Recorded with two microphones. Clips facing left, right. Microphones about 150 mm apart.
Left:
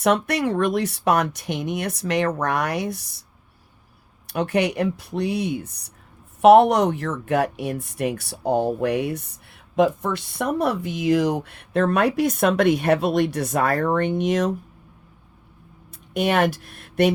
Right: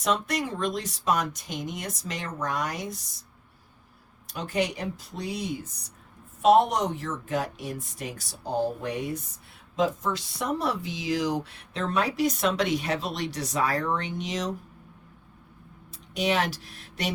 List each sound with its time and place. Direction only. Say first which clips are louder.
0.0 s speech: left 7 dB; 65° left (ahead or behind)
4.3 s speech: left 7 dB; 65° left (ahead or behind)
16.1 s speech: left 6 dB; 55° left (ahead or behind)